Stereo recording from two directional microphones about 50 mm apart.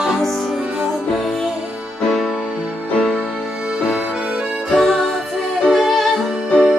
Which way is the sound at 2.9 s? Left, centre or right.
Centre.